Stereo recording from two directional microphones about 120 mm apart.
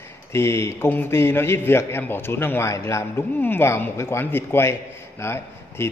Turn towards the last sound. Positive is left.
turn(degrees=20)  # may be behind; listen again after turning